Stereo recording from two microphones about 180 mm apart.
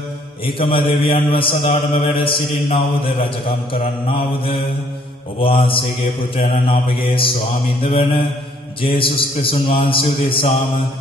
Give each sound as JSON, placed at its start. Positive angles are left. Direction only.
{"t": 0.5, "sound": "a man's voice", "side_deg": 30}
{"t": 5.4, "sound": "a man's voice", "side_deg": 30}
{"t": 7.8, "sound": "mantra", "side_deg": 30}
{"t": 8.8, "sound": "a man's voice", "side_deg": 30}